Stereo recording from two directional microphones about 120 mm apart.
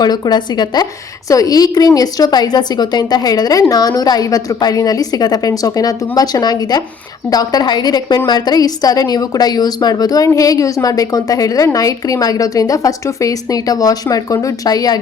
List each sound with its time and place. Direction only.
0.0 s a woman's voice: 35° left (ahead or behind)